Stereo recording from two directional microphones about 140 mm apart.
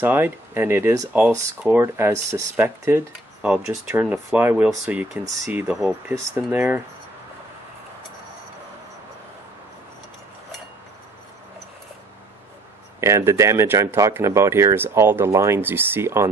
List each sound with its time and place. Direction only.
0.0 s speech: 15° right (ahead or behind)
13.0 s speech: 20° right (ahead or behind)